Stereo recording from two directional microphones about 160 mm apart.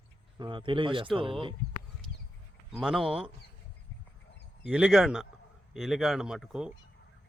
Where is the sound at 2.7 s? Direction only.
5° right (ahead or behind).